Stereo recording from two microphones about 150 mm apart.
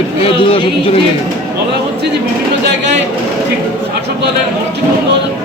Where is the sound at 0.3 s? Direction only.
35° left (ahead or behind).